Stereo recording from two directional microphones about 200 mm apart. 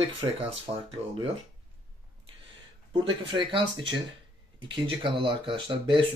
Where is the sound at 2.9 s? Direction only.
25° right (ahead or behind).